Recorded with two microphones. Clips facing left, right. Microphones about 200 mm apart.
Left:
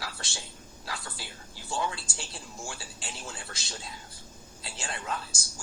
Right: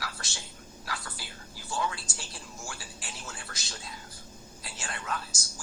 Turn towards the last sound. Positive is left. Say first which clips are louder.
# left 1 dB
turn(degrees=25)  # may be behind; listen again after turning